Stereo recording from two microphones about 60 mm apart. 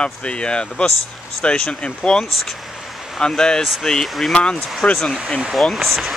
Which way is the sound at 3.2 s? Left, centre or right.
Centre.